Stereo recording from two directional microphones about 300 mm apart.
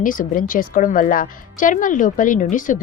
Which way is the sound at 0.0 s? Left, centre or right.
Left.